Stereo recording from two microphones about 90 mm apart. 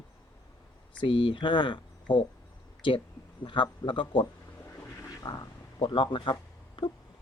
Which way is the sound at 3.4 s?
65° left (ahead or behind).